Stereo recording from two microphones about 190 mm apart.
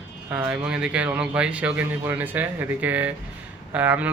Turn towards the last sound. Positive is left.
turn(degrees=-10)  # may be behind; listen again after turning